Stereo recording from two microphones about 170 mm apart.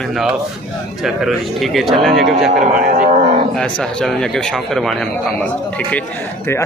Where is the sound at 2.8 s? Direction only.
55° right (ahead or behind).